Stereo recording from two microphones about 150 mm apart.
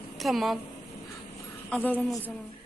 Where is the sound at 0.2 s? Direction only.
Centre (ahead or behind).